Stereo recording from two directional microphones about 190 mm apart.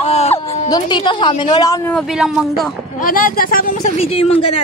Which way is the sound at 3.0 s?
45° left (ahead or behind).